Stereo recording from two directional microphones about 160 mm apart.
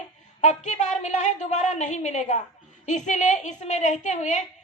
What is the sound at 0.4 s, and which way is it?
A woman's voice, 45° left (ahead or behind).